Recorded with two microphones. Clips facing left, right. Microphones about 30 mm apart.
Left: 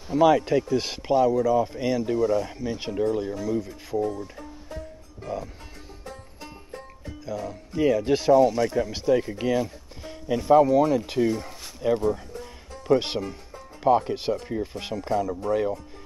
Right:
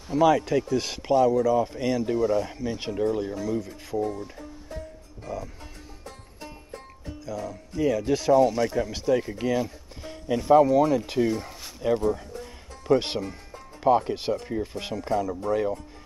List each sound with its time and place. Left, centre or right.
0.1 s speech: centre
4.4 s music: centre
7.2 s speech: centre
8.3 s speech: centre